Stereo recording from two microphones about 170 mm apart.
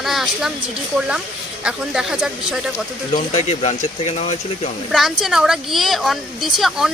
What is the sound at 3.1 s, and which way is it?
Speech, 40° left (ahead or behind).